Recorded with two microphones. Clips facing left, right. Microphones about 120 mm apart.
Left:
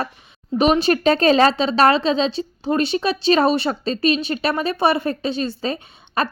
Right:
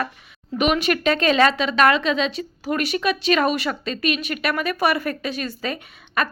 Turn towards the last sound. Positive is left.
turn(degrees=30)  # may be behind; listen again after turning